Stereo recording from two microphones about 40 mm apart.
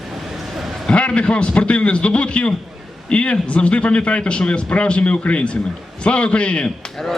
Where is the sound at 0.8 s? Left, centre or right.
Left.